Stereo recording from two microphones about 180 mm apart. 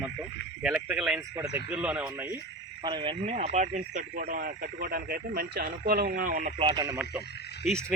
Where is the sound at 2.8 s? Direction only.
25° right (ahead or behind); by 6.5 s 50° right (ahead or behind).